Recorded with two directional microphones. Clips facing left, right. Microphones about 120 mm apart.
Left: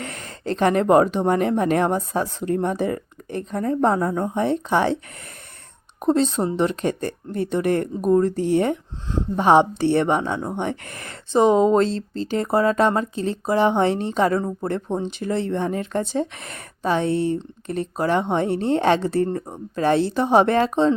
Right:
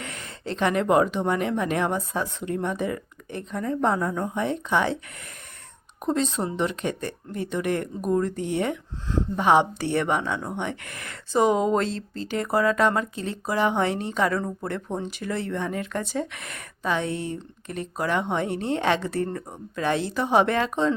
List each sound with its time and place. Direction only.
0.0 s speech: 40° left (ahead or behind)
6.0 s speech: 35° left (ahead or behind)
9.0 s speech: 20° left (ahead or behind)
9.4 s speech: 35° left (ahead or behind)